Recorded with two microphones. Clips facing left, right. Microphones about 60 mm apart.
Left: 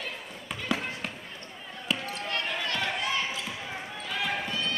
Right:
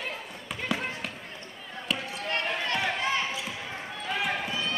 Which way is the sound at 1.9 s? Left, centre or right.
Centre.